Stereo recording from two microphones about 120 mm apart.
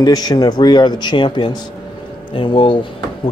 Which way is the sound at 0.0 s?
35° left (ahead or behind).